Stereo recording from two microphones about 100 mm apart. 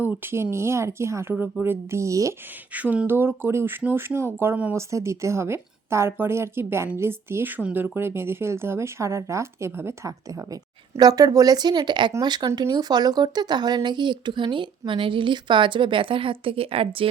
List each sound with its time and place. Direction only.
0.0 s speech: 25° right (ahead or behind)
2.7 s speech: 15° right (ahead or behind); by 17.1 s 70° right (ahead or behind)